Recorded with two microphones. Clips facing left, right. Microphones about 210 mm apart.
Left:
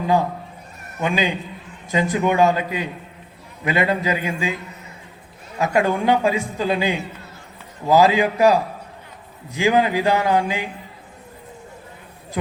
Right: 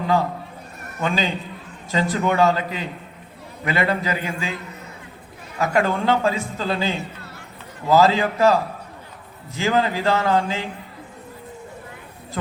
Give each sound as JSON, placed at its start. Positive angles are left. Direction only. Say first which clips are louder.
{"t": 0.9, "sound": "a man's voice", "louder": "left 2 dB", "side_deg": 15}
{"t": 5.5, "sound": "a man's voice", "louder": "left 1 dB", "side_deg": 20}